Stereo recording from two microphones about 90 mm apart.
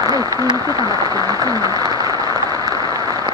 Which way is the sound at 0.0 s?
45° right (ahead or behind).